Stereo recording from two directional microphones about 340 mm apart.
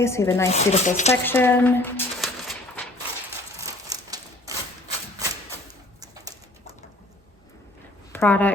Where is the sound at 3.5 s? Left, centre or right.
Centre.